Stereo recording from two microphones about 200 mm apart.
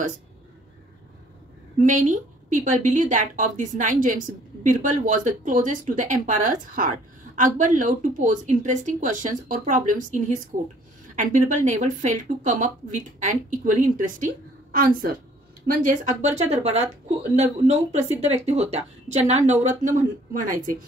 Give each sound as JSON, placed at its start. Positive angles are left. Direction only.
{"t": 1.8, "sound": "a woman's voice", "side_deg": -40}